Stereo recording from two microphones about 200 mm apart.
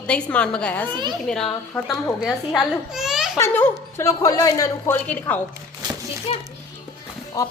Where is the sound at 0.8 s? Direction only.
20° right (ahead or behind).